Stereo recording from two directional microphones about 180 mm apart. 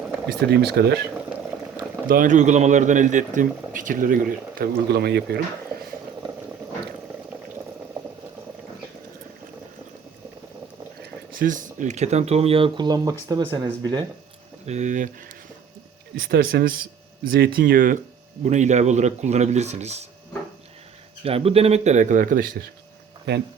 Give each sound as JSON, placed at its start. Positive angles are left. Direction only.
{"t": 0.3, "sound": "speech", "side_deg": -65}
{"t": 2.0, "sound": "speech", "side_deg": -50}
{"t": 11.0, "sound": "speech", "side_deg": -50}
{"t": 14.7, "sound": "speech", "side_deg": -40}
{"t": 16.3, "sound": "a man's voice", "side_deg": -55}
{"t": 21.2, "sound": "speech", "side_deg": -35}